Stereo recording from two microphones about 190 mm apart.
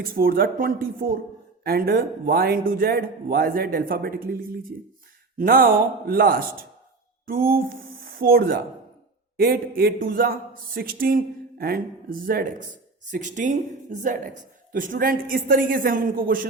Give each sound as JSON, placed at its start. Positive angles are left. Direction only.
{"t": 0.0, "sound": "speech", "side_deg": -50}